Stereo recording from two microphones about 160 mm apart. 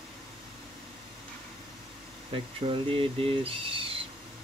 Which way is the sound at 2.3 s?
35° right (ahead or behind).